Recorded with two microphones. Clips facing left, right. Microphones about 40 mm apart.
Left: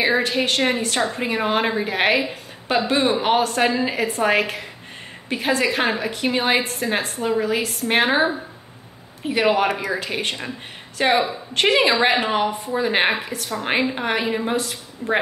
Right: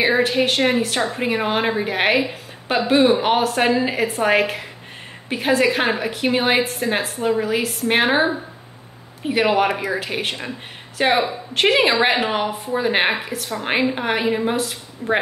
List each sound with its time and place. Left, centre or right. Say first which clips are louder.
0.0 s a woman's voice: right 2 dB; centre